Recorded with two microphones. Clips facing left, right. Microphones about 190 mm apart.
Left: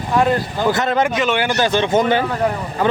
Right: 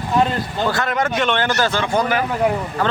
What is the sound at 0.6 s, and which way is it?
Speech, 20° left (ahead or behind).